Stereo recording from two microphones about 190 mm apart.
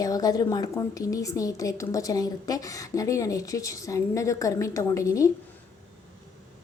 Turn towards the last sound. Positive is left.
turn(degrees=15)  # may be behind; listen again after turning